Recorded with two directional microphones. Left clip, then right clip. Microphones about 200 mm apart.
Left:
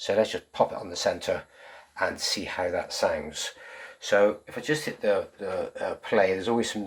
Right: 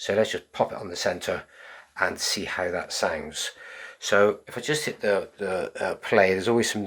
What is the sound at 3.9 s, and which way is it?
Speech, 35° right (ahead or behind).